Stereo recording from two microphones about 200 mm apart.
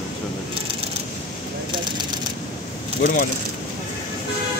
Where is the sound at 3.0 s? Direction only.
45° left (ahead or behind).